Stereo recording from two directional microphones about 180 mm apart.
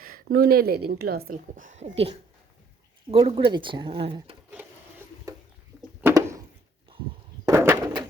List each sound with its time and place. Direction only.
0.0 s a woman's voice: 55° right (ahead or behind); by 4.4 s 30° right (ahead or behind)
4.5 s wood: 10° right (ahead or behind)
6.0 s a sound: 15° right (ahead or behind)
7.4 s bird: 15° right (ahead or behind)